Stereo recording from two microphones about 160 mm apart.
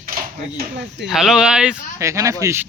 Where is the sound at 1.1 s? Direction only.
Centre (ahead or behind).